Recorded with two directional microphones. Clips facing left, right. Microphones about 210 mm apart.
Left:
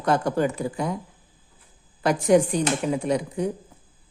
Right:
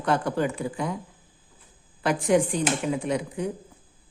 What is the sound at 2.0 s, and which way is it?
Speech, 40° left (ahead or behind).